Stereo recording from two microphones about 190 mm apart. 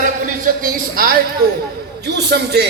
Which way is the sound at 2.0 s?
60° right (ahead or behind).